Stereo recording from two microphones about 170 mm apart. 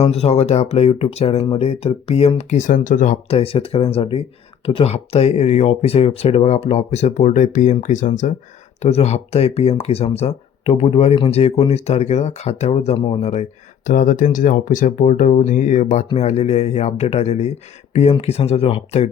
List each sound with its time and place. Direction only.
0.0 s speech: 35° left (ahead or behind)